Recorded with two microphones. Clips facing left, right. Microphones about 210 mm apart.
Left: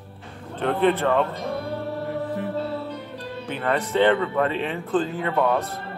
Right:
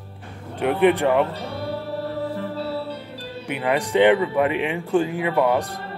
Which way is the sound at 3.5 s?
15° right (ahead or behind).